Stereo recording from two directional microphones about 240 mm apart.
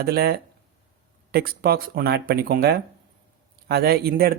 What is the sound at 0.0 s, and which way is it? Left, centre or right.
Speech, right.